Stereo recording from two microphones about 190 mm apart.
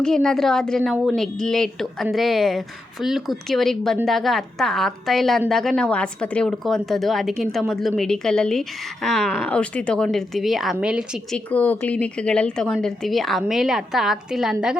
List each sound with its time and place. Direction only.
0.0 s a woman's voice: 5° left (ahead or behind)